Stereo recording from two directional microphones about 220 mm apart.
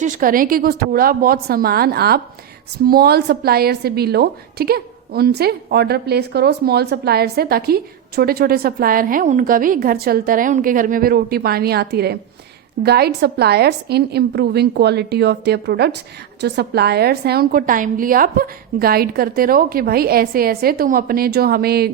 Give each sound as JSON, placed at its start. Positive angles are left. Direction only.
{"t": 0.0, "sound": "a woman's voice", "side_deg": -40}